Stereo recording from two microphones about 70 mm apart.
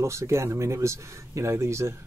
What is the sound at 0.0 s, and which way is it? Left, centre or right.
Speech, right.